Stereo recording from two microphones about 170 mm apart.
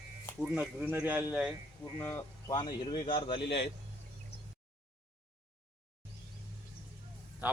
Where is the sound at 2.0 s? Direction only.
15° left (ahead or behind).